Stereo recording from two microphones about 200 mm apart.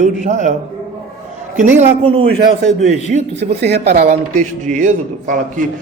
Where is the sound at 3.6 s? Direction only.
55° right (ahead or behind).